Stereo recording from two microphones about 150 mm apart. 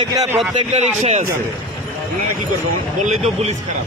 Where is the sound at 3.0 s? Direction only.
45° right (ahead or behind).